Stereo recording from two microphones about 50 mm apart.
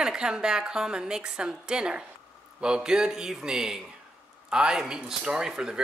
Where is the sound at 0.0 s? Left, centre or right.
Centre.